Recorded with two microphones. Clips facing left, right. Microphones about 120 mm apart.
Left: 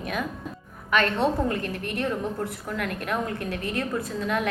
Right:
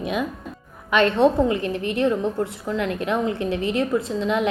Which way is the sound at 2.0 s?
25° right (ahead or behind).